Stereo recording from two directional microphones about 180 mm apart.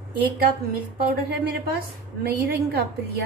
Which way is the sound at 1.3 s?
60° right (ahead or behind).